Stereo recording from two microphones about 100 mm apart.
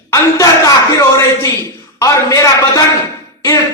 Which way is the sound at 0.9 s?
35° left (ahead or behind).